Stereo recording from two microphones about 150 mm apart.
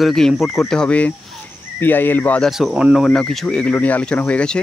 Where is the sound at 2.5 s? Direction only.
Centre (ahead or behind).